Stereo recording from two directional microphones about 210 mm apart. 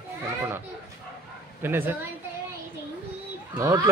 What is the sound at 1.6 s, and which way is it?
Speech, 10° right (ahead or behind).